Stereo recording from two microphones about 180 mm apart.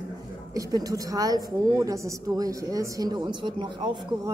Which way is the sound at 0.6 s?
20° right (ahead or behind).